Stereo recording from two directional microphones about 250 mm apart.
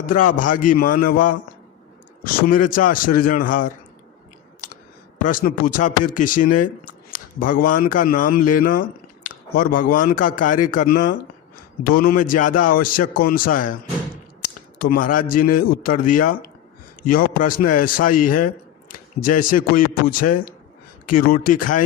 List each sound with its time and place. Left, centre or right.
0.0 s a man's voice: left
5.2 s a man's voice: left
14.9 s a man's voice: left